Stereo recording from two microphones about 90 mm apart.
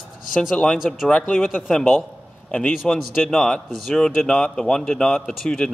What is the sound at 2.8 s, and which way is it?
A man's voice, 5° left (ahead or behind).